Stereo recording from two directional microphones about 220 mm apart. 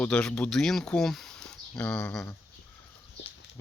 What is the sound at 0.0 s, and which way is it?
Speech, 5° left (ahead or behind).